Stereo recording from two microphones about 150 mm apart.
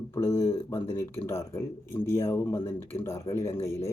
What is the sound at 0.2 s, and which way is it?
Speech, 15° left (ahead or behind).